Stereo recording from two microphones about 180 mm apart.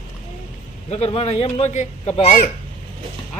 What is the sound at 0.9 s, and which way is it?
A man's voice, 35° left (ahead or behind).